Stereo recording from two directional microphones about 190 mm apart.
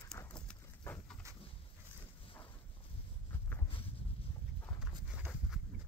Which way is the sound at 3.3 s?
10° left (ahead or behind).